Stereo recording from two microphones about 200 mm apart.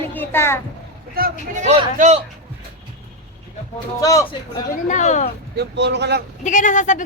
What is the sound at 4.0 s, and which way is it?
Speech, 15° left (ahead or behind).